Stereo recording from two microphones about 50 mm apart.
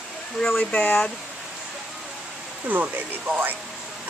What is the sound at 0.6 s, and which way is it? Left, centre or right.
Speech, left.